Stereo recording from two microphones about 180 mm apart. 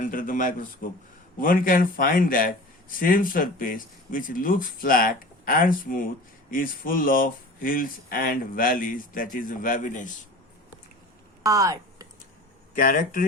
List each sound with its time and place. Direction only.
0.1 s speech: 50° left (ahead or behind)
11.4 s speech: 20° right (ahead or behind)
12.7 s speech: 50° left (ahead or behind)